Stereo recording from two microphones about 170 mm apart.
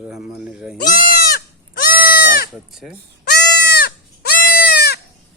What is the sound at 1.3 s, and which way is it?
Goat, 55° left (ahead or behind).